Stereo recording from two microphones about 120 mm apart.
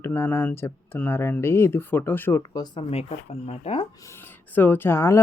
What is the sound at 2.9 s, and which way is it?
Speech, 60° left (ahead or behind).